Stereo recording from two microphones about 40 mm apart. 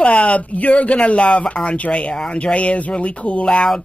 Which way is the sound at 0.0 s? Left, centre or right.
Left.